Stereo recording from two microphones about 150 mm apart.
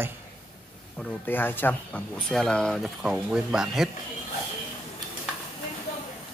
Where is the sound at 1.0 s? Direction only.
10° left (ahead or behind).